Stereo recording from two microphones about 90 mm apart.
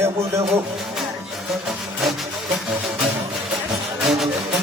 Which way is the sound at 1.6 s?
Centre (ahead or behind).